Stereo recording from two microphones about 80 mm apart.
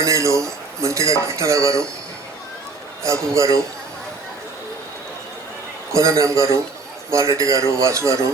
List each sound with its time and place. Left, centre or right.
0.0 s cutlery: right
3.0 s cutlery: right
5.9 s cutlery: right